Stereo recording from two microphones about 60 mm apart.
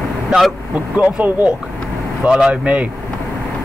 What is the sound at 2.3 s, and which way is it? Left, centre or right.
Speech, centre.